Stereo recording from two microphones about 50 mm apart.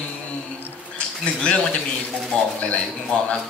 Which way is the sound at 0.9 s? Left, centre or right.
Left.